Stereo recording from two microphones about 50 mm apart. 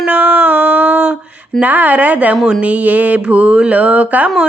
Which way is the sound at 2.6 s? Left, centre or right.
Right.